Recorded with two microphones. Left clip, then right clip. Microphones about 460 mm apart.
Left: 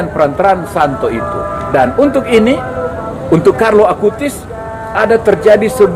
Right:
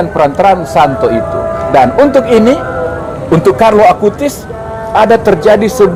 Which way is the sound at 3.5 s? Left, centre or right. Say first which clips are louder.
Right 3 dB; right.